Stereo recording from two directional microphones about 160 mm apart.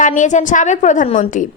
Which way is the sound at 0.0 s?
50° left (ahead or behind).